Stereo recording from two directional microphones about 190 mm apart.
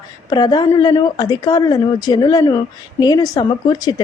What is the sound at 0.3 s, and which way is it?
Speech, 20° left (ahead or behind).